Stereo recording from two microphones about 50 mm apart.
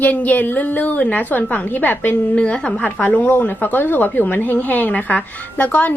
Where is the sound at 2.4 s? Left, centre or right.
Left.